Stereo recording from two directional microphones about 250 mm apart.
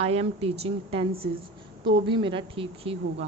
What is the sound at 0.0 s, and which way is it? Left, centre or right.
A woman's voice, right.